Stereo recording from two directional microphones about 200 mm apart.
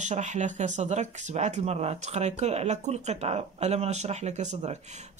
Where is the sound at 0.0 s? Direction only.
35° right (ahead or behind).